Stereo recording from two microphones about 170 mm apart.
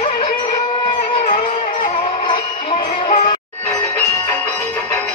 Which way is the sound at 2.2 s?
35° left (ahead or behind).